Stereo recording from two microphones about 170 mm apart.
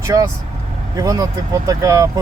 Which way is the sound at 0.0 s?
20° right (ahead or behind).